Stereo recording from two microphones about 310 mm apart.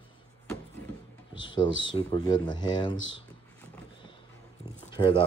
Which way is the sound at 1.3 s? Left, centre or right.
Centre.